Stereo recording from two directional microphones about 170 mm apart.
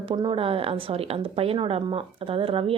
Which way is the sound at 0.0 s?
30° right (ahead or behind).